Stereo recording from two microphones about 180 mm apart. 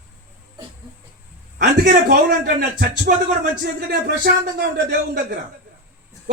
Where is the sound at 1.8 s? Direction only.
55° right (ahead or behind).